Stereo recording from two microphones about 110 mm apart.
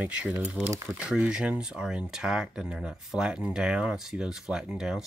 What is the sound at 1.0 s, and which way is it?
Speech, 5° right (ahead or behind).